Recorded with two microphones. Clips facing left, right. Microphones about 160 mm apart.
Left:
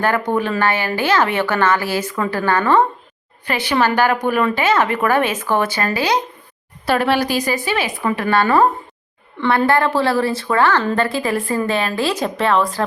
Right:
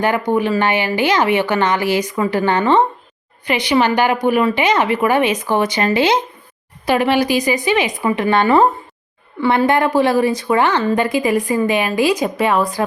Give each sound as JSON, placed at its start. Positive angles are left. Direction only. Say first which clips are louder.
{"t": 0.0, "sound": "speech", "louder": "right 2 dB", "side_deg": -15}
{"t": 9.6, "sound": "speech", "louder": "right 2 dB", "side_deg": -15}